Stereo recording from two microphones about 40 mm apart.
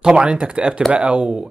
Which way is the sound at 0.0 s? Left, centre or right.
Right.